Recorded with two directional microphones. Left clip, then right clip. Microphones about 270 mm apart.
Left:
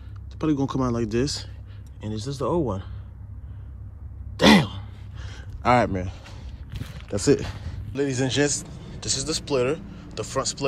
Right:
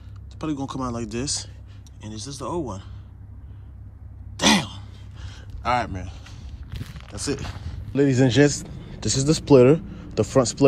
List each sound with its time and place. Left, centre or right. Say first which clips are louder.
0.4 s speech: left 4 dB; centre
4.4 s sigh: left 2 dB; centre
6.7 s walk: left 6 dB; centre
7.2 s speech: left 8 dB; centre
7.9 s a man's voice: right 5 dB; centre